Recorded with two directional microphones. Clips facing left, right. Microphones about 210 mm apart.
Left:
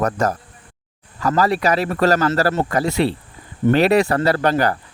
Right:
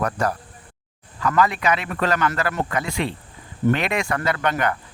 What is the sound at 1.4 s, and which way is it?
Speech, 35° left (ahead or behind).